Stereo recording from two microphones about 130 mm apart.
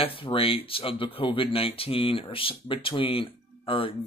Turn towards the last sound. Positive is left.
turn(degrees=45)  # may be behind; listen again after turning